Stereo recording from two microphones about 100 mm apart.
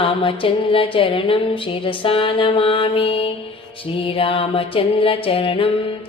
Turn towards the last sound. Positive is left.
turn(degrees=65)  # may be behind; listen again after turning